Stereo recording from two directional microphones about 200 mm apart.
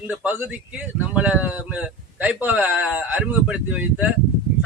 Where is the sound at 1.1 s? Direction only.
5° right (ahead or behind).